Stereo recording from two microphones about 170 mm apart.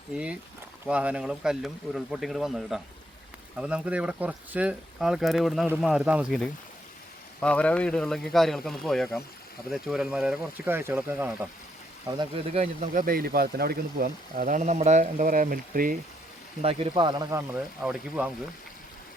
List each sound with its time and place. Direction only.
0.9 s speech: 5° right (ahead or behind)
12.1 s speech: 25° right (ahead or behind)
12.8 s speech: 50° right (ahead or behind)
16.6 s speech: 35° right (ahead or behind)
17.8 s speech: 5° right (ahead or behind)